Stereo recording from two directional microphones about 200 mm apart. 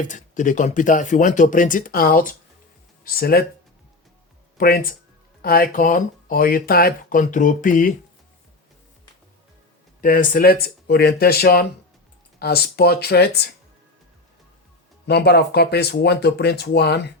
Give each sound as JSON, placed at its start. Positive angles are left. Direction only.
{"t": 0.0, "sound": "speech", "side_deg": 40}
{"t": 4.5, "sound": "speech", "side_deg": 45}
{"t": 10.0, "sound": "speech", "side_deg": 45}
{"t": 15.0, "sound": "speech", "side_deg": 55}